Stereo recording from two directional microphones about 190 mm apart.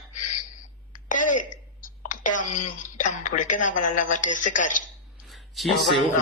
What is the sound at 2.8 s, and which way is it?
A woman's voice, 40° left (ahead or behind).